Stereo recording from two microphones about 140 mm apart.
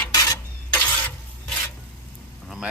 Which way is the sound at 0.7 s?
10° left (ahead or behind).